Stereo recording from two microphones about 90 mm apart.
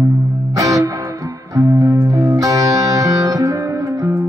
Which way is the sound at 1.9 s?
40° right (ahead or behind).